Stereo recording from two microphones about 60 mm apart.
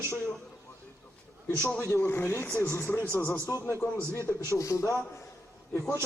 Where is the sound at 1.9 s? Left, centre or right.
Left.